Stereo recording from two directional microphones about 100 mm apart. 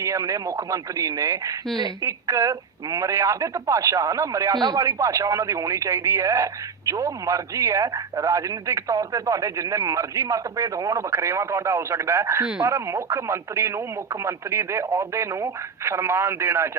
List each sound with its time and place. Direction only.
0.0 s speech: 30° right (ahead or behind)
4.5 s speech: 45° right (ahead or behind)
4.8 s speech: 30° right (ahead or behind)